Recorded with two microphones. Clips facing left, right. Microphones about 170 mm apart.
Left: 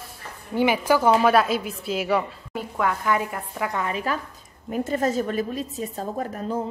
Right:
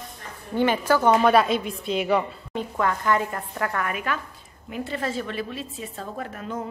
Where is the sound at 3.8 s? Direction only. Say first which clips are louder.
Left 2 dB; 30° left (ahead or behind).